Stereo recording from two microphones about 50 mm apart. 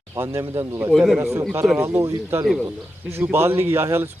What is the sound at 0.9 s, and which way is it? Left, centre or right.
Speech, centre.